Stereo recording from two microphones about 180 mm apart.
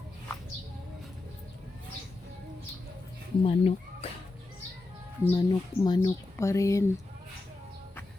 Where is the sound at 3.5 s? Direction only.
30° left (ahead or behind).